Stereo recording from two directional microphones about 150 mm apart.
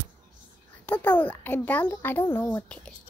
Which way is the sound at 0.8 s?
10° left (ahead or behind).